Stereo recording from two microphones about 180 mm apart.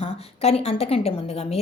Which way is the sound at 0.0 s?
35° left (ahead or behind).